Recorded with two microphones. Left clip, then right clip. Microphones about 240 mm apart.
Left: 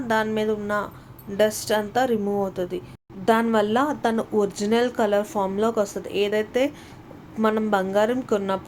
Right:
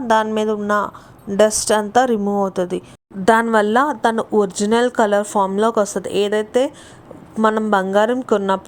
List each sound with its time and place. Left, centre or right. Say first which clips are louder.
0.1 s a woman's voice: right 6 dB; right